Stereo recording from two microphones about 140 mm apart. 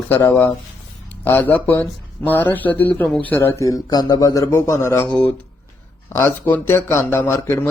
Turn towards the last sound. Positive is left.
turn(degrees=20)  # may be behind; listen again after turning